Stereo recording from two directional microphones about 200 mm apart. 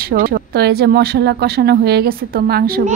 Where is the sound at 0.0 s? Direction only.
45° right (ahead or behind).